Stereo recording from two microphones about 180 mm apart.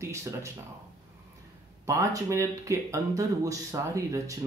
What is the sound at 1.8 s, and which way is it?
Speech, 20° right (ahead or behind).